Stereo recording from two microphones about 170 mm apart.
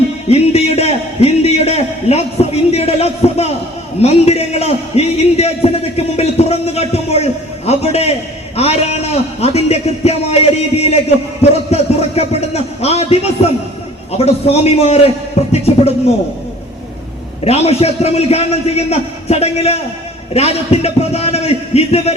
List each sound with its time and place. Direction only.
0.3 s a man's voice: 35° left (ahead or behind)
11.7 s a sound: 35° left (ahead or behind)
14.2 s a man's voice: 35° left (ahead or behind)
17.4 s a man's voice: 35° left (ahead or behind)